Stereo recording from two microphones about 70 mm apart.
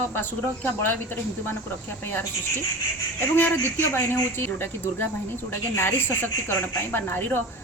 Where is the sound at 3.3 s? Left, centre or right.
Left.